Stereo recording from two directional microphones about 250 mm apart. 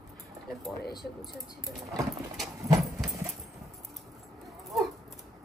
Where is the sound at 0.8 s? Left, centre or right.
Left.